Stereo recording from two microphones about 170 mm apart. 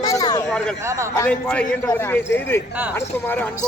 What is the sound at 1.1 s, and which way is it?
A man's voice, 10° left (ahead or behind).